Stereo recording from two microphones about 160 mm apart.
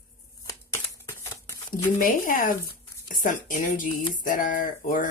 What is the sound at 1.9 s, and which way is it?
Speech, 60° left (ahead or behind).